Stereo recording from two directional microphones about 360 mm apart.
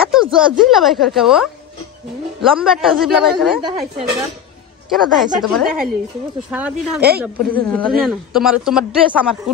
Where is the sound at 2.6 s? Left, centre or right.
Centre.